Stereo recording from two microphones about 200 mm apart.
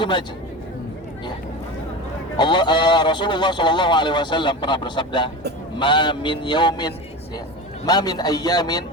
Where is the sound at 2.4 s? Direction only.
25° left (ahead or behind).